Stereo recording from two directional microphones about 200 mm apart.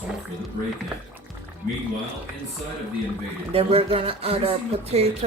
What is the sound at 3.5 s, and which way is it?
Speech, 30° right (ahead or behind).